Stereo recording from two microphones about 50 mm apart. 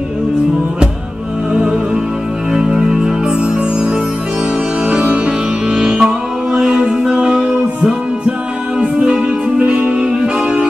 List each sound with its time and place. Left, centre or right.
1.5 s music: centre
5.0 s music: right